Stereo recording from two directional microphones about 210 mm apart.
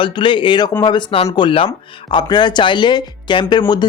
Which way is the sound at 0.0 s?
25° left (ahead or behind).